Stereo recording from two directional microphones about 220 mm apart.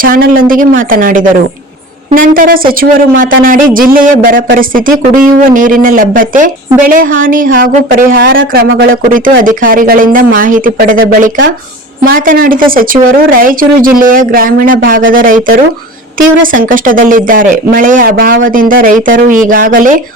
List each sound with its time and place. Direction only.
0.0 s speech: 40° right (ahead or behind)